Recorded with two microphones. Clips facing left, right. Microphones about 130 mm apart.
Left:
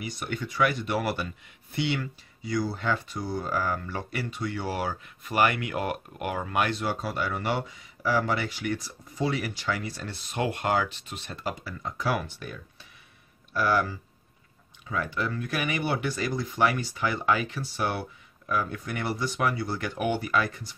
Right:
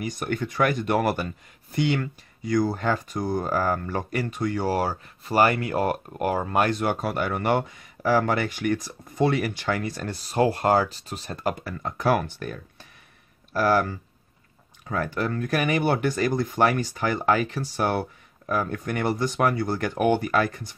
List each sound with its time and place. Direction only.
0.0 s speech: 45° right (ahead or behind)
6.8 s speech: 55° right (ahead or behind)